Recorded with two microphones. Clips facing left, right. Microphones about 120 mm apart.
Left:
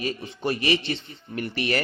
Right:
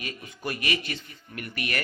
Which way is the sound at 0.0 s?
30° left (ahead or behind).